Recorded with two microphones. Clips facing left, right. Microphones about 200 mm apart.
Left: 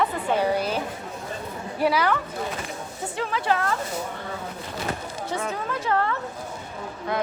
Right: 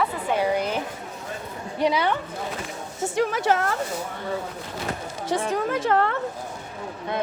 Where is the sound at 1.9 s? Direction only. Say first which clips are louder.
Left 1 dB; 25° right (ahead or behind).